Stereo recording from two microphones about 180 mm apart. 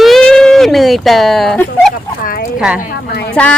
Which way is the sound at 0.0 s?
Centre (ahead or behind).